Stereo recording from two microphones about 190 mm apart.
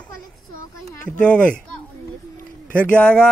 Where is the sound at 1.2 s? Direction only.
5° left (ahead or behind).